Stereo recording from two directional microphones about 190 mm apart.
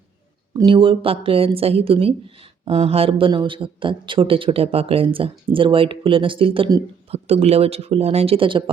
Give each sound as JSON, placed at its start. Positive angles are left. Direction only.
{"t": 0.5, "sound": "speech", "side_deg": -25}